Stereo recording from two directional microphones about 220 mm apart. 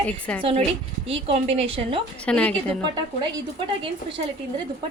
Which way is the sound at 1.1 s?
25° right (ahead or behind).